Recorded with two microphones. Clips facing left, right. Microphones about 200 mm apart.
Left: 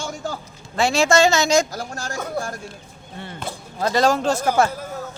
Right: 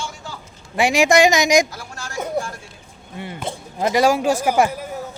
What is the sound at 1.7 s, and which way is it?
Speech, 40° left (ahead or behind).